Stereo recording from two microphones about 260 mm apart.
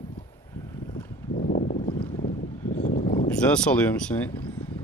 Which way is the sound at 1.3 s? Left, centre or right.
Left.